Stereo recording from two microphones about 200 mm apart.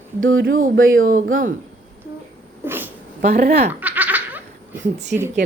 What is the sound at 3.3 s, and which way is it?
Speech, 50° right (ahead or behind).